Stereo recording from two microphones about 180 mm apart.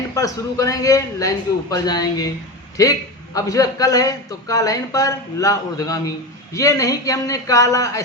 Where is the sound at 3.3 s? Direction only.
20° left (ahead or behind).